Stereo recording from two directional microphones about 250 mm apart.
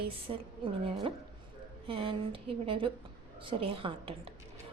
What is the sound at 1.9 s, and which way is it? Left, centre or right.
A woman's voice, right.